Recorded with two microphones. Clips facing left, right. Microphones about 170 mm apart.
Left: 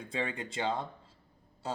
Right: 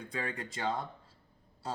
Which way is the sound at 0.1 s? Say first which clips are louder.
Left 3 dB; 25° left (ahead or behind).